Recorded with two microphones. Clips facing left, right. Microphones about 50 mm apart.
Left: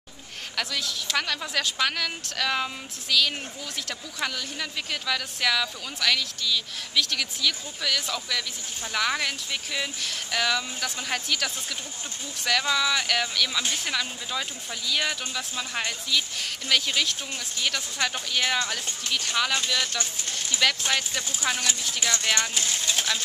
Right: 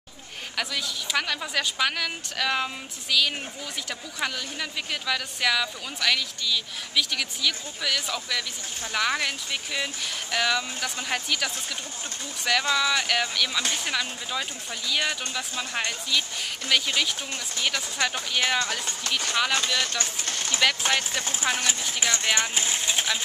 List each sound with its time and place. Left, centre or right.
0.6 s speech: centre
20.0 s speech: right
21.4 s speech: right